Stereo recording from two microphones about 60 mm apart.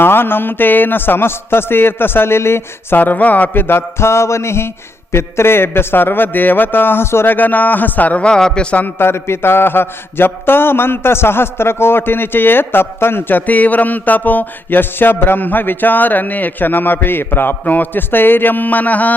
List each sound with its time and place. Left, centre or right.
0.0 s a man's voice: left
3.0 s a man's voice: left
7.3 s a man's voice: left
8.3 s a man's voice: centre
8.7 s a man's voice: left
9.0 s a man's voice: left